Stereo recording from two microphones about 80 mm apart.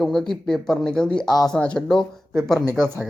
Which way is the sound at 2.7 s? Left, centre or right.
Right.